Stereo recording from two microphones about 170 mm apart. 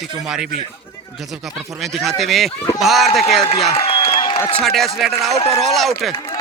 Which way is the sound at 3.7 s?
35° left (ahead or behind).